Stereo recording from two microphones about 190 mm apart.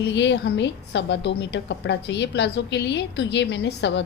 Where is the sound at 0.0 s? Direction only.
65° left (ahead or behind).